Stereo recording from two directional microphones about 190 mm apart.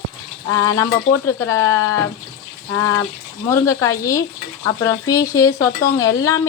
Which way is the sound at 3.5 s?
15° left (ahead or behind).